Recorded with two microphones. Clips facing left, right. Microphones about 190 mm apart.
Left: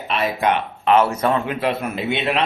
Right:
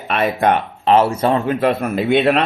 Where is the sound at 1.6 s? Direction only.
50° right (ahead or behind).